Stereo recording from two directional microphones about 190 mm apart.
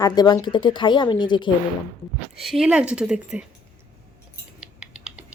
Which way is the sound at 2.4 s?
Centre (ahead or behind).